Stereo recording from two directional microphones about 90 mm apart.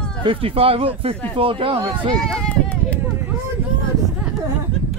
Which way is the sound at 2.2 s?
10° left (ahead or behind).